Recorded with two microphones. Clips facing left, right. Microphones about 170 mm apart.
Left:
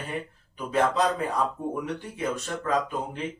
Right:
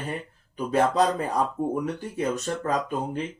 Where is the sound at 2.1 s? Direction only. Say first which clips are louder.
Right 4 dB; 40° right (ahead or behind).